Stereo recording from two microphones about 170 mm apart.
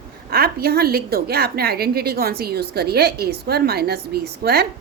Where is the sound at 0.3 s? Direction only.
65° right (ahead or behind).